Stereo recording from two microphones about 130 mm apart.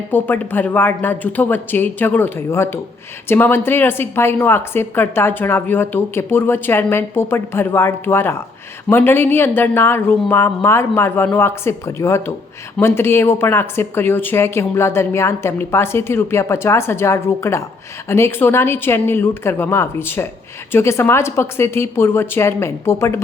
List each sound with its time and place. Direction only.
0.1 s a woman's voice: 15° left (ahead or behind)